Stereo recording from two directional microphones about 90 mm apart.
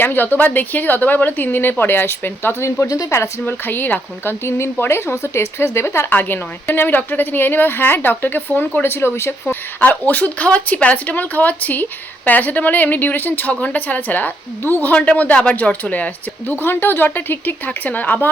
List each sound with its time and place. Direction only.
0.0 s a woman's voice: 20° left (ahead or behind)
2.8 s a woman's voice: 40° left (ahead or behind)
9.8 s speech: 15° left (ahead or behind)